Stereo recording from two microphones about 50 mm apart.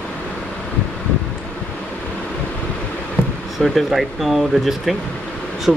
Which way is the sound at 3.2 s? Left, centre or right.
Left.